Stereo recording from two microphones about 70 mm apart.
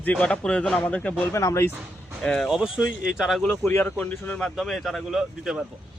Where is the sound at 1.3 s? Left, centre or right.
Left.